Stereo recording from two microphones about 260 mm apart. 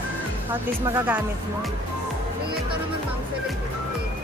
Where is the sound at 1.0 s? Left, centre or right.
Centre.